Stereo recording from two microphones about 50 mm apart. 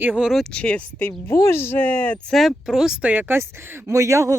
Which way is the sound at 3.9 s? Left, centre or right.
Right.